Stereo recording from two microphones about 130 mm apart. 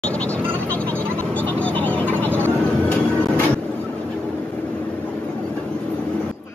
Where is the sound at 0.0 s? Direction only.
10° left (ahead or behind).